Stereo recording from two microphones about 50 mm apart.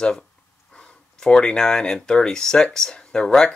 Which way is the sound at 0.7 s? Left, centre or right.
Centre.